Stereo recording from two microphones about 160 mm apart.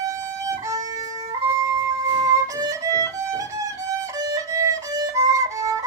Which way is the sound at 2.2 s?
20° right (ahead or behind).